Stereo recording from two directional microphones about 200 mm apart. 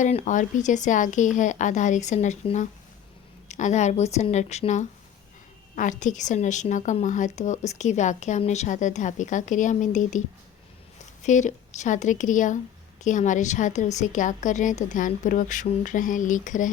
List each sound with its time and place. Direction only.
0.0 s speech: 35° left (ahead or behind)